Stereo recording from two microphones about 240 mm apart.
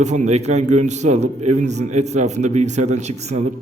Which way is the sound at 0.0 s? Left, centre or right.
Right.